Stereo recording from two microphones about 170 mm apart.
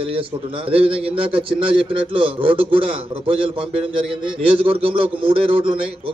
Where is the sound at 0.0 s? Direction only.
30° right (ahead or behind).